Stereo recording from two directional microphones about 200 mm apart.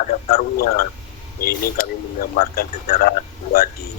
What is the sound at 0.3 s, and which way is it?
Speech, 45° left (ahead or behind).